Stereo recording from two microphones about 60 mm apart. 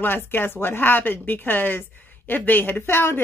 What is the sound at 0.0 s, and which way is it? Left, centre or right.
A woman's voice, left.